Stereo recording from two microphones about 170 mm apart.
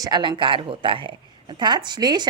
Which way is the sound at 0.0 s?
25° right (ahead or behind).